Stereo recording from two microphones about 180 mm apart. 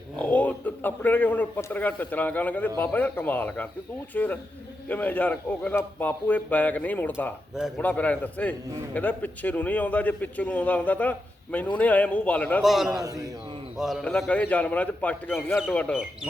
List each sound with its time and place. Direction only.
0.2 s a man's voice: 10° left (ahead or behind)
12.9 s a man's voice: 20° right (ahead or behind)
13.7 s a man's voice: centre (ahead or behind)